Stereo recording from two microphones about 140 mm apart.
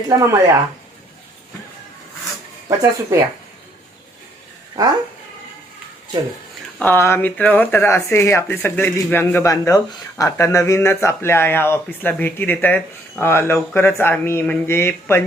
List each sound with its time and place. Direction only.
0.1 s speech: 20° right (ahead or behind)
2.6 s speech: 20° right (ahead or behind)
6.7 s speech: 15° left (ahead or behind)